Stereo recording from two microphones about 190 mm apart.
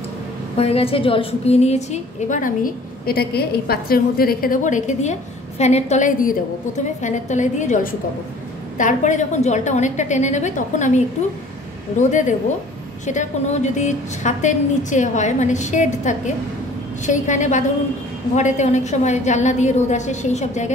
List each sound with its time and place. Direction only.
0.6 s a woman's voice: 30° left (ahead or behind)